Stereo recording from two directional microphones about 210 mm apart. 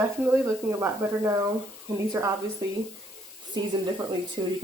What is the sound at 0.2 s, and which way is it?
Speech, 10° right (ahead or behind).